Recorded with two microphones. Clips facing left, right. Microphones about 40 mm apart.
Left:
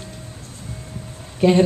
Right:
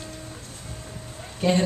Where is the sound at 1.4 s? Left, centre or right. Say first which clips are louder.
Left 7 dB; centre.